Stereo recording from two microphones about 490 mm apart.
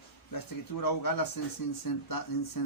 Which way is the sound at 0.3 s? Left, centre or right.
Left.